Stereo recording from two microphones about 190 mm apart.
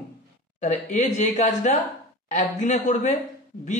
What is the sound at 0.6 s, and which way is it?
Speech, 40° left (ahead or behind).